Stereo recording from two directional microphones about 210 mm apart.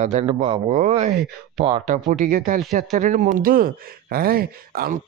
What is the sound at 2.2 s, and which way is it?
Speech, 40° right (ahead or behind).